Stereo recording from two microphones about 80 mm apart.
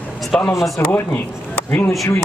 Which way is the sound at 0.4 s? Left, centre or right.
Left.